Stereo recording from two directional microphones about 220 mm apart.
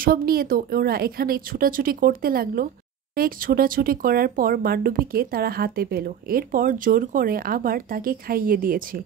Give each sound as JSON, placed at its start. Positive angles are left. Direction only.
{"t": 0.0, "sound": "speech", "side_deg": -40}